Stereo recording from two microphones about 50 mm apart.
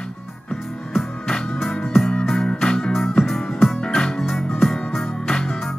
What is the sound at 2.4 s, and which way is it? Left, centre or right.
Music, centre.